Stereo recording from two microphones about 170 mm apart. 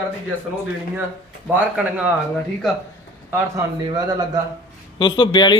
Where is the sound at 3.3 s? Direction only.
20° right (ahead or behind).